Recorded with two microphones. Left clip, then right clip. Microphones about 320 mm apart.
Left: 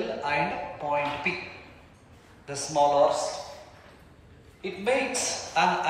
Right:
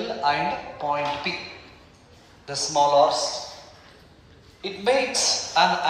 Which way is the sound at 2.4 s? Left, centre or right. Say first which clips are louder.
Right 3 dB; centre.